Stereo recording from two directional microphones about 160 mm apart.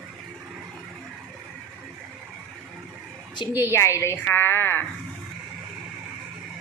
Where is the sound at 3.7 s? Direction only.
15° left (ahead or behind).